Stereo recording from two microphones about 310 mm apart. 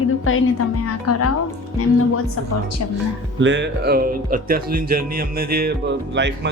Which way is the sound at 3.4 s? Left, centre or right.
Right.